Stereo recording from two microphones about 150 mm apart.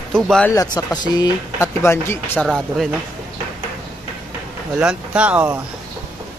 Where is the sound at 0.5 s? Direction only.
25° left (ahead or behind).